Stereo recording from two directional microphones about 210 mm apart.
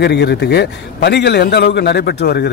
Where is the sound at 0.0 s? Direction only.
50° left (ahead or behind).